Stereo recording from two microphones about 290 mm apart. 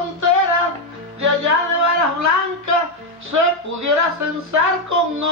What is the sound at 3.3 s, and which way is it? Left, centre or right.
Speech, right.